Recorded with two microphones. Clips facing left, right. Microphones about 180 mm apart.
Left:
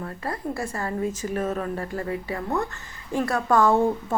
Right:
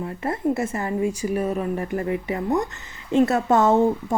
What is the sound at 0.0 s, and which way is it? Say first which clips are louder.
Speech: right 6 dB; 20° right (ahead or behind).